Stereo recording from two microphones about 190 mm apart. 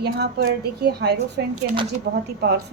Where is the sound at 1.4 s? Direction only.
70° right (ahead or behind).